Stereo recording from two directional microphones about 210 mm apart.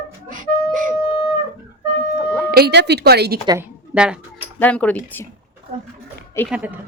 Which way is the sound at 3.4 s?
15° right (ahead or behind).